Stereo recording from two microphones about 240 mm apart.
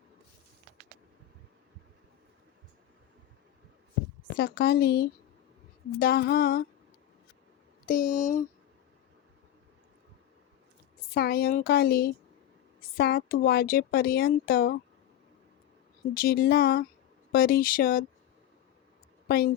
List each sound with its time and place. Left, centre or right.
4.4 s speech: left
7.9 s speech: left
11.1 s speech: left
16.1 s speech: left